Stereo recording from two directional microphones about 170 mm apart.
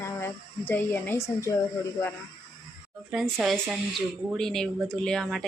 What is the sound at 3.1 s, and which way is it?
A woman's voice, centre (ahead or behind).